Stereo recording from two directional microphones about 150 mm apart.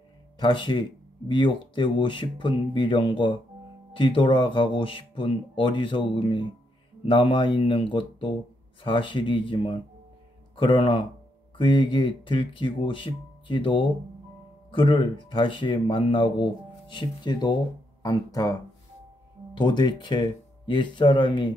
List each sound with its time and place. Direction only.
0.4 s speech: 30° left (ahead or behind)